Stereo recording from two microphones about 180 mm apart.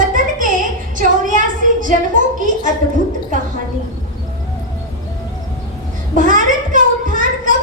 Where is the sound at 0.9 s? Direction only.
45° right (ahead or behind).